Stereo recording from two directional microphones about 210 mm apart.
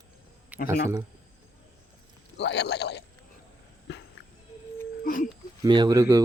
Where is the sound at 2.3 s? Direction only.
55° left (ahead or behind).